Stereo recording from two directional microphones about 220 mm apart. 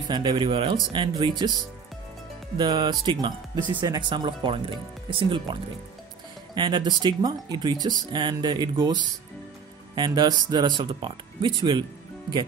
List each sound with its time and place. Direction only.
0.1 s speech: 20° right (ahead or behind)
2.5 s speech: 20° right (ahead or behind)